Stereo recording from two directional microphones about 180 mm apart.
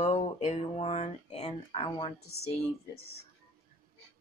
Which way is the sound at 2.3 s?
35° left (ahead or behind).